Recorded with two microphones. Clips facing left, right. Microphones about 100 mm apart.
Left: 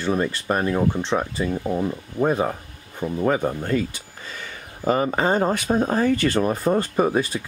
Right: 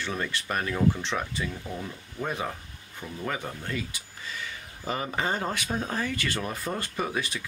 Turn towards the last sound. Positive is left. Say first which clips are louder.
# left 10 dB
turn(degrees=40)  # may be behind; listen again after turning